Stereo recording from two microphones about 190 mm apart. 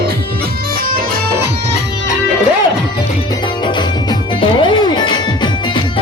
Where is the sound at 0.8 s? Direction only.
50° right (ahead or behind).